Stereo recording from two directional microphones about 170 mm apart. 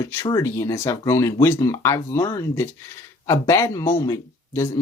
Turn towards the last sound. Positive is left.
turn(degrees=15)  # may be behind; listen again after turning